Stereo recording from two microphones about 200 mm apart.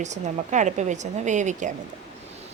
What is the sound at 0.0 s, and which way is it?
A woman's voice, 35° right (ahead or behind).